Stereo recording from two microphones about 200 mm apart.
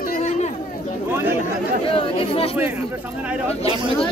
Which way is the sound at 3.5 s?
30° left (ahead or behind).